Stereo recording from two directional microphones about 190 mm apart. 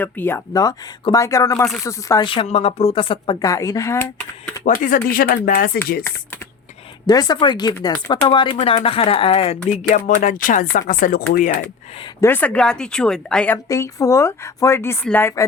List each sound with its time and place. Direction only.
0.0 s a woman's voice: 10° left (ahead or behind)
4.6 s speech: 45° left (ahead or behind)
7.1 s speech: 20° left (ahead or behind)
10.2 s speech: 45° left (ahead or behind)
12.2 s a woman's voice: 10° left (ahead or behind)